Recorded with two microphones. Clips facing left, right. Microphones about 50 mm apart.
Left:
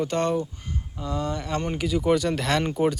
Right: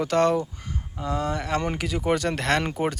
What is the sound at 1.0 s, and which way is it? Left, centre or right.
Speech, right.